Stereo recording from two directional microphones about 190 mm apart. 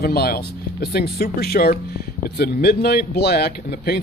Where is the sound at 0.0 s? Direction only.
55° left (ahead or behind).